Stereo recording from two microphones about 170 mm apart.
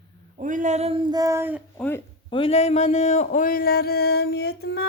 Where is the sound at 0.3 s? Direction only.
45° right (ahead or behind).